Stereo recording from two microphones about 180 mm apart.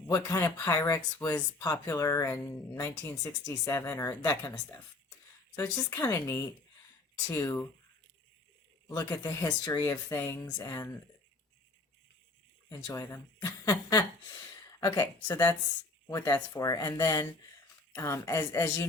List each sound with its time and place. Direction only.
0.1 s speech: 20° left (ahead or behind)
8.9 s speech: 20° left (ahead or behind)
12.6 s speech: 20° left (ahead or behind)